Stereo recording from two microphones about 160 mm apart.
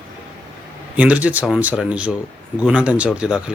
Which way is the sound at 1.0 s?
10° right (ahead or behind).